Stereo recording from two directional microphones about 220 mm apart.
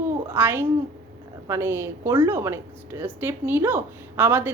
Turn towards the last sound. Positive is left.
turn(degrees=-10)  # may be behind; listen again after turning